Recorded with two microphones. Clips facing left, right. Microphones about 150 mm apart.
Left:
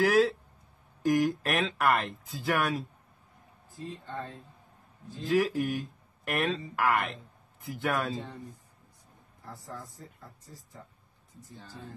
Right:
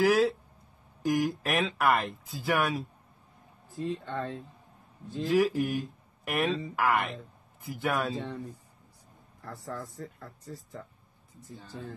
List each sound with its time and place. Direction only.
0.0 s speech: centre (ahead or behind)
3.8 s speech: 85° right
5.3 s speech: centre (ahead or behind)
9.7 s speech: 85° right